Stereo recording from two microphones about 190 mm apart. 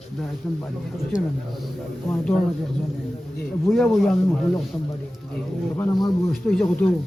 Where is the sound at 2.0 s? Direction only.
10° left (ahead or behind).